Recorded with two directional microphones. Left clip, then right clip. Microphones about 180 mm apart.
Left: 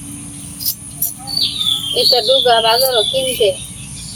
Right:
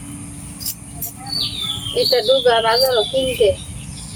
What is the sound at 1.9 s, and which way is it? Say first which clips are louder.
Speech: left 2 dB; 20° right (ahead or behind).